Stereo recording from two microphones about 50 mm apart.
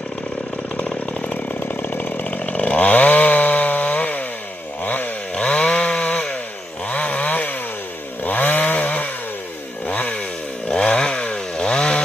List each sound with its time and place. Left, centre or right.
0.7 s chainsaw: left
1.6 s chainsaw: left
5.3 s chainsaw: left
10.7 s chainsaw: centre